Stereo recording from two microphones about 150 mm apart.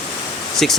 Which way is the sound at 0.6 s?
5° left (ahead or behind).